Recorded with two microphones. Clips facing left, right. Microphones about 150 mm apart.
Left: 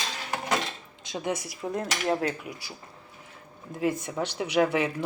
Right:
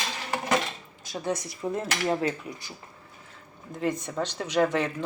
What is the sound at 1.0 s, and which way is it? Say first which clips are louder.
Speech: even; 20° left (ahead or behind).